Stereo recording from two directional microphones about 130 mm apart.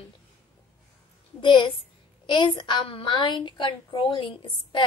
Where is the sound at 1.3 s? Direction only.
40° left (ahead or behind).